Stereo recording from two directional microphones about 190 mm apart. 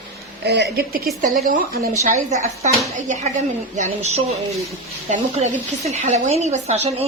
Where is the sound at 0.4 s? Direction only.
60° right (ahead or behind).